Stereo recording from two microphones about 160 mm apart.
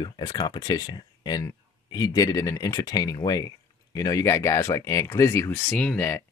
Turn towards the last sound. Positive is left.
turn(degrees=15)  # may be behind; listen again after turning